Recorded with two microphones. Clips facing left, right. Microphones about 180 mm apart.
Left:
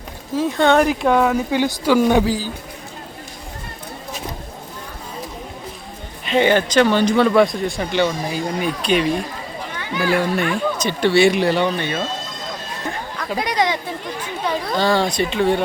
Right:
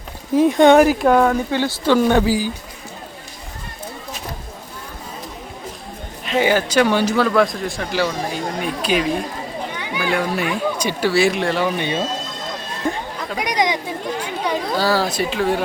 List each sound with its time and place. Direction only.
0.3 s speech: 15° right (ahead or behind)
0.8 s speech: centre (ahead or behind)
2.2 s speech: 10° right (ahead or behind)
6.2 s speech: 5° right (ahead or behind)
9.7 s a sound: 15° right (ahead or behind)
10.0 s speech: centre (ahead or behind)
11.8 s speech: 15° right (ahead or behind)
13.4 s speech: 15° right (ahead or behind)